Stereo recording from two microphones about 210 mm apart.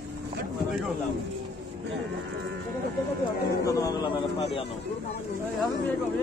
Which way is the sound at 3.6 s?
15° left (ahead or behind).